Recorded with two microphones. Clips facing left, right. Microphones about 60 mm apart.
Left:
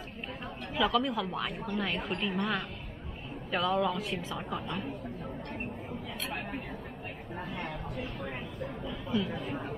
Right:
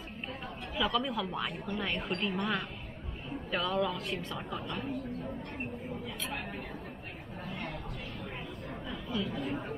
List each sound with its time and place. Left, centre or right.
0.7 s a woman's voice: centre
9.1 s speech: centre
9.4 s a woman's voice: centre